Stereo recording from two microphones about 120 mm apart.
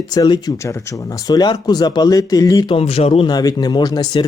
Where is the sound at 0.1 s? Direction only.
30° left (ahead or behind).